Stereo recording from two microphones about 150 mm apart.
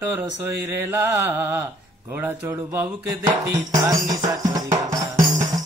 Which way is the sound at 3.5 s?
20° right (ahead or behind).